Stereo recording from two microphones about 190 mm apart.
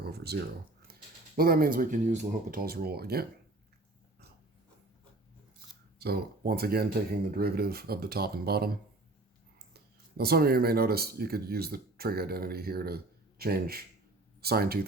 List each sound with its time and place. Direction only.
0.0 s speech: 55° right (ahead or behind)
6.0 s speech: 55° right (ahead or behind)